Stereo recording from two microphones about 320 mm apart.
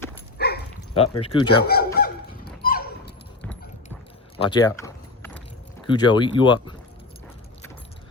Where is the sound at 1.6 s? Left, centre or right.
Left.